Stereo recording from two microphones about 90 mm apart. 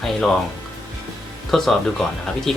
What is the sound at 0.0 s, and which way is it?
Speech, 5° left (ahead or behind).